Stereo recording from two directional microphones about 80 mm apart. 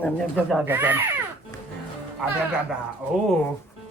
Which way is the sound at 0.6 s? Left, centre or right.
Right.